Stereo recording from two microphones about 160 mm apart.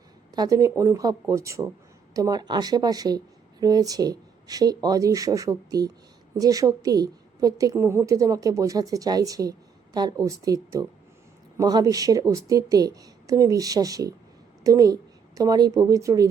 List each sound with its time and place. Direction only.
0.3 s a woman's voice: 20° right (ahead or behind)